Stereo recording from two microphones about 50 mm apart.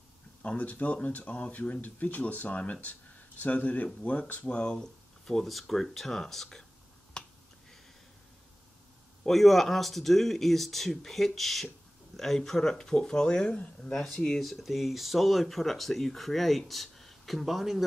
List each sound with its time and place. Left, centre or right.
0.6 s speech: left
4.7 s a sound: centre
5.5 s speech: centre
7.2 s finger snapping: centre
9.2 s speech: centre; by 14.0 s left
14.4 s speech: centre